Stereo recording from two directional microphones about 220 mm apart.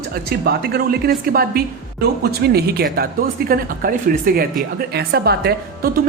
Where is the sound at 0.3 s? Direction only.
45° right (ahead or behind).